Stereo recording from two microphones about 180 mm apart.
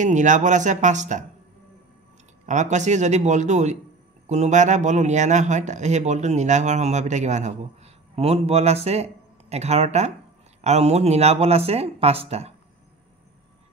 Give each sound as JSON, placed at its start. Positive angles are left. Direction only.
{"t": 0.0, "sound": "speech", "side_deg": -45}
{"t": 2.4, "sound": "speech", "side_deg": -40}